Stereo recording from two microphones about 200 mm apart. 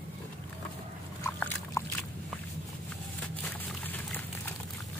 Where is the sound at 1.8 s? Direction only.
15° left (ahead or behind).